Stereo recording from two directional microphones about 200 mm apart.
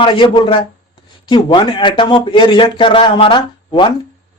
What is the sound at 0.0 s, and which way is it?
A man's voice, 25° left (ahead or behind).